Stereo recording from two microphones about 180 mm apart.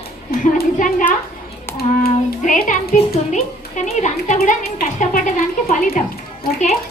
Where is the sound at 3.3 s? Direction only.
40° left (ahead or behind).